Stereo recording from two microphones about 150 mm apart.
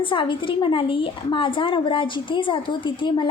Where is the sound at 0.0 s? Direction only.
35° left (ahead or behind).